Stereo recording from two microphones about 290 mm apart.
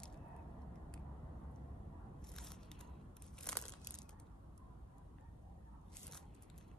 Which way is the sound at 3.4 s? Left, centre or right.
Centre.